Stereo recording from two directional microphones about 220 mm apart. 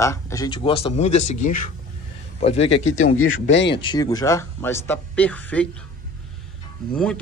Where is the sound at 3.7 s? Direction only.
20° left (ahead or behind).